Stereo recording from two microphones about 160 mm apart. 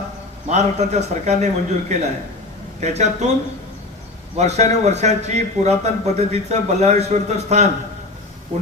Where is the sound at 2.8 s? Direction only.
45° right (ahead or behind).